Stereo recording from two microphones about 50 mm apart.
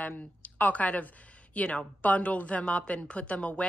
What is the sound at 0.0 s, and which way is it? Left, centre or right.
Speech, left.